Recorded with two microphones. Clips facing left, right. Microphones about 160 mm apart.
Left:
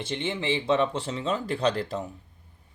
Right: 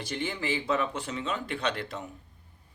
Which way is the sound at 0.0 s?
25° left (ahead or behind).